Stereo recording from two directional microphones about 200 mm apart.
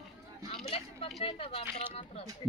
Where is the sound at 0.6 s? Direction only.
30° left (ahead or behind).